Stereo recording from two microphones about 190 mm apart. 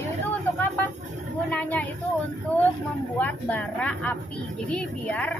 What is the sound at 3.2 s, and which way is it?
A woman's voice, 10° left (ahead or behind).